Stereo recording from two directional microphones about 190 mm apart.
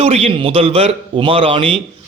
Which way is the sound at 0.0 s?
35° right (ahead or behind).